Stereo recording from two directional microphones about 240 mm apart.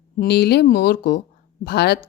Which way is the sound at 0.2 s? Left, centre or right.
Left.